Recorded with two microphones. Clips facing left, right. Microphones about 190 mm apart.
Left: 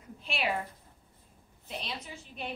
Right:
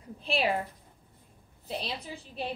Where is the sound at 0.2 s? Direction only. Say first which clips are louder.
Right 5 dB; 30° right (ahead or behind).